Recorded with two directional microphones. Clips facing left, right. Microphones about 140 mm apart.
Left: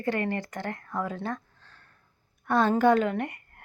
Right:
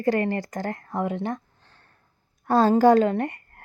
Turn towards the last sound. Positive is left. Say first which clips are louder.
# right 5 dB
turn(degrees=-35)  # may be behind; listen again after turning